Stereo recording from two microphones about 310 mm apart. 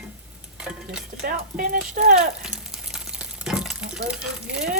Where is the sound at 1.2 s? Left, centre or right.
Right.